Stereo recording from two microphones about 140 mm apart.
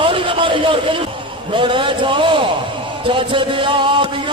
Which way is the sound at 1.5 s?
35° right (ahead or behind).